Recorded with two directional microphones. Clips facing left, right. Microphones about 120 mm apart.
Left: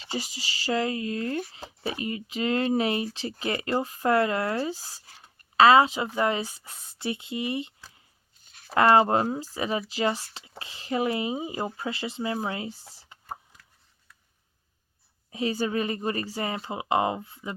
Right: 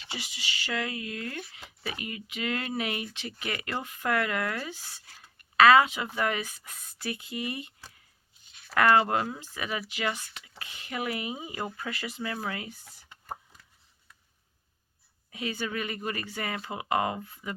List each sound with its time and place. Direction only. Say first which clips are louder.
0.0 s speech: left 6 dB; 40° left (ahead or behind)
8.4 s a sound: left 3 dB; 40° left (ahead or behind)
8.7 s speech: left 3 dB; 30° left (ahead or behind)
15.3 s speech: left 6 dB; 30° left (ahead or behind)